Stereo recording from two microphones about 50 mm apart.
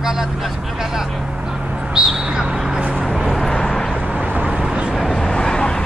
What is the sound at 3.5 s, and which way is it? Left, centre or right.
Vehicle, centre.